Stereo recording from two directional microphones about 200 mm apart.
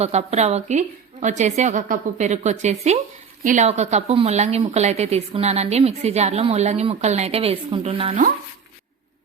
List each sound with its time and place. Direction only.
0.0 s a woman's voice: 35° right (ahead or behind)